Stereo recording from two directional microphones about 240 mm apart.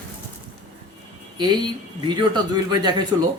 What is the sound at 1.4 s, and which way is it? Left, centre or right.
A man's voice, centre.